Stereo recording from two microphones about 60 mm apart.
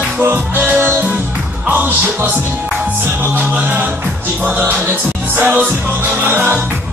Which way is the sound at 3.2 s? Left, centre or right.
Right.